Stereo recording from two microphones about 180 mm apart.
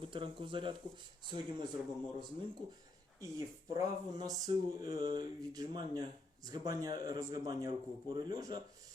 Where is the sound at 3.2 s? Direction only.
20° right (ahead or behind).